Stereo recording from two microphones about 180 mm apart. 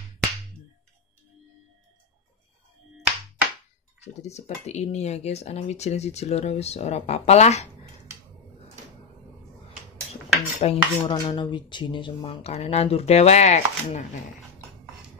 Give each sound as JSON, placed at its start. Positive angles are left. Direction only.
{"t": 3.0, "sound": "a sound", "side_deg": -5}
{"t": 4.0, "sound": "speech", "side_deg": 35}
{"t": 10.6, "sound": "speech", "side_deg": 30}